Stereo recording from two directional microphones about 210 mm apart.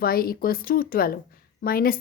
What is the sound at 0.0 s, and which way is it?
Speech, 45° left (ahead or behind).